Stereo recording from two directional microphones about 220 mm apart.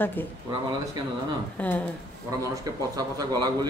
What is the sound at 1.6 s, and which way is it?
Speech, 5° left (ahead or behind).